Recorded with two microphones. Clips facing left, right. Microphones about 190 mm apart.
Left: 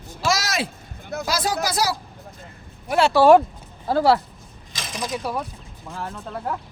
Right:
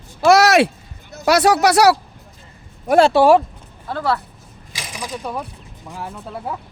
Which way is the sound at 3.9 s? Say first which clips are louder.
Left 4 dB; 30° left (ahead or behind).